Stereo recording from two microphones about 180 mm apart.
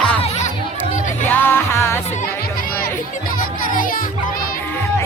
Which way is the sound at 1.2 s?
10° left (ahead or behind).